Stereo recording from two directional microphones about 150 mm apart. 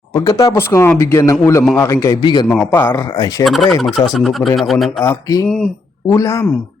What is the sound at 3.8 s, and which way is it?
Speech, centre (ahead or behind).